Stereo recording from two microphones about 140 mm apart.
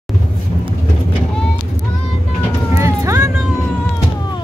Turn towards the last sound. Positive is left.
turn(degrees=-20)  # may be behind; listen again after turning